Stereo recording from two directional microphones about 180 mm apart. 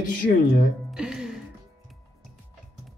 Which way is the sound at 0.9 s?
5° right (ahead or behind).